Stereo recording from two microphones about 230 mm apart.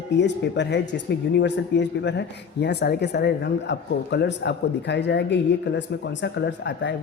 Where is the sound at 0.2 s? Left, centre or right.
Left.